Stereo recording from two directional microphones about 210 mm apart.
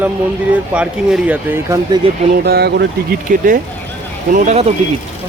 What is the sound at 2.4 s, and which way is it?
Speech, 50° right (ahead or behind).